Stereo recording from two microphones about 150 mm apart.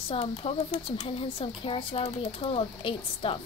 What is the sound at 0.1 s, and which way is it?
A woman's voice, 40° left (ahead or behind).